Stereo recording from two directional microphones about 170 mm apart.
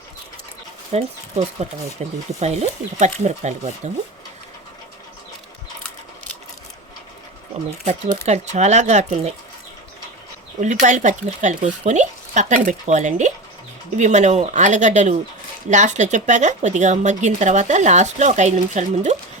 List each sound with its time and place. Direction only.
0.9 s speech: 40° right (ahead or behind)
8.3 s speech: 40° right (ahead or behind)
10.6 s speech: 45° right (ahead or behind)